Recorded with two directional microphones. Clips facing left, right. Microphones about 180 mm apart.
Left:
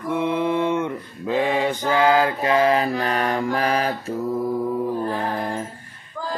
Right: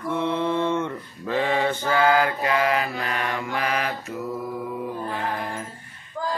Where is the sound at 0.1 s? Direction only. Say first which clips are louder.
Left 3 dB; 15° left (ahead or behind).